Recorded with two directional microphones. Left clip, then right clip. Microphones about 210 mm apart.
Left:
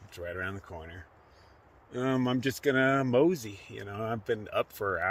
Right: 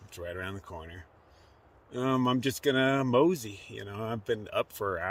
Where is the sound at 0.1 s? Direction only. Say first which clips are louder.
Left 2 dB; 5° right (ahead or behind).